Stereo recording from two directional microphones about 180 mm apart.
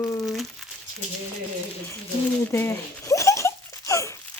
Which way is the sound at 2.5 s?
15° left (ahead or behind).